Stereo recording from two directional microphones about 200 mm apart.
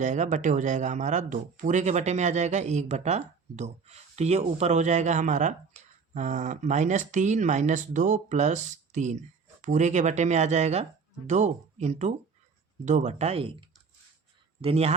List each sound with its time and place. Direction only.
0.0 s speech: 35° right (ahead or behind)